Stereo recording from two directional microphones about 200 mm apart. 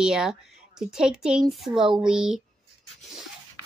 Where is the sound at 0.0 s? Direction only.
5° right (ahead or behind).